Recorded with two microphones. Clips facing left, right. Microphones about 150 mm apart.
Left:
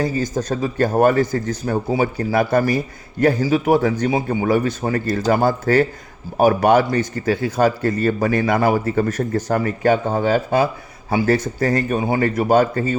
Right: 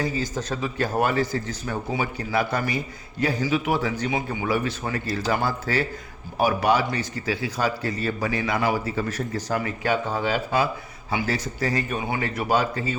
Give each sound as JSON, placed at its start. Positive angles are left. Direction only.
{"t": 0.2, "sound": "a man's voice", "side_deg": 45}